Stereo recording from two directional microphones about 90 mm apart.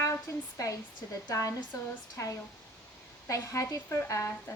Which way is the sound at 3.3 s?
35° left (ahead or behind).